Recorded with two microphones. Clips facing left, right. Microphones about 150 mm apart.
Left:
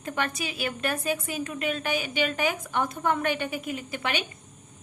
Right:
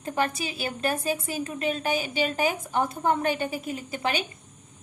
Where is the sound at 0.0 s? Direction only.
30° right (ahead or behind).